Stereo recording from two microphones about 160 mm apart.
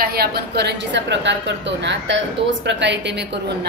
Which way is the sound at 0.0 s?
75° right (ahead or behind).